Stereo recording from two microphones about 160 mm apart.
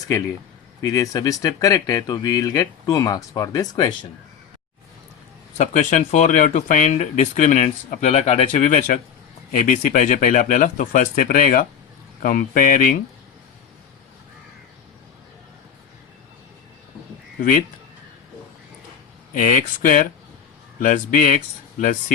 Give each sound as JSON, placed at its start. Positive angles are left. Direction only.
{"t": 0.8, "sound": "speech", "side_deg": 20}
{"t": 5.5, "sound": "speech", "side_deg": 50}
{"t": 19.3, "sound": "speech", "side_deg": 55}